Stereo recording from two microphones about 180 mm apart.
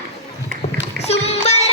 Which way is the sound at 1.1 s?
35° left (ahead or behind).